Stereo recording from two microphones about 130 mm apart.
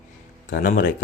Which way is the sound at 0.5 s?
90° left.